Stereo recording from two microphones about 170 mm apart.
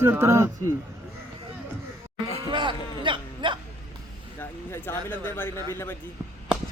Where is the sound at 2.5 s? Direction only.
30° right (ahead or behind).